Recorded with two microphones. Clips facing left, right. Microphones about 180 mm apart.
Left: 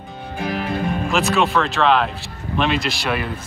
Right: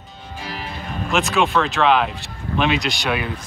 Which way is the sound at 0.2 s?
60° left (ahead or behind).